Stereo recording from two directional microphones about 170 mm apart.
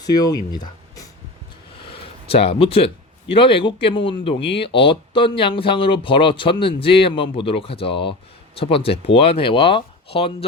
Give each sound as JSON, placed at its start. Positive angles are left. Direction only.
{"t": 0.0, "sound": "speech", "side_deg": 20}